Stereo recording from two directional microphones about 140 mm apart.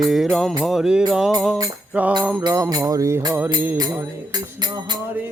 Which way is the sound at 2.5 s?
25° right (ahead or behind).